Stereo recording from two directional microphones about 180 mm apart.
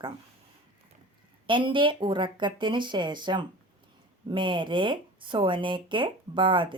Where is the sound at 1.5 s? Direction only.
25° right (ahead or behind).